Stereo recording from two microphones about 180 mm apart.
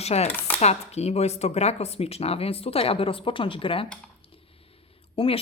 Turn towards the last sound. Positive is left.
turn(degrees=30)  # may be behind; listen again after turning